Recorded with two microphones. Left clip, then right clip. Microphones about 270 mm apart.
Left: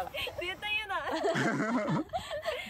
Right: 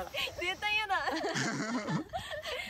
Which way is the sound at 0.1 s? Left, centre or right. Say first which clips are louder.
Right 1 dB; centre.